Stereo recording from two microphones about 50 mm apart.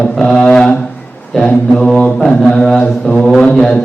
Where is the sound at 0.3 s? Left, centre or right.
Centre.